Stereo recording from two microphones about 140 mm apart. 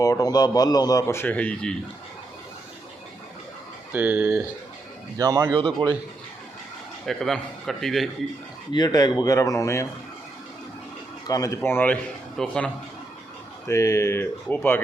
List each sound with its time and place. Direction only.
0.0 s a man's voice: 25° left (ahead or behind); by 1.7 s 10° left (ahead or behind)
3.9 s speech: 10° right (ahead or behind)
5.1 s speech: 25° right (ahead or behind)
5.5 s a man's voice: 35° right (ahead or behind)
7.0 s a man's voice: centre (ahead or behind)
8.7 s a man's voice: 30° left (ahead or behind)
11.3 s a man's voice: 25° left (ahead or behind); by 12.7 s 10° left (ahead or behind)
13.7 s a man's voice: 20° left (ahead or behind)